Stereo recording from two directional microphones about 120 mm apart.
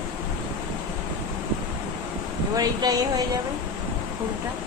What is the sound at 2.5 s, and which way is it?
Speech, 30° right (ahead or behind).